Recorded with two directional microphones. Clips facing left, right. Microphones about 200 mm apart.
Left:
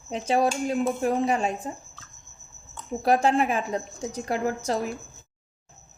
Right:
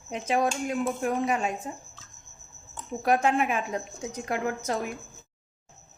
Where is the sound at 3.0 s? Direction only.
35° left (ahead or behind).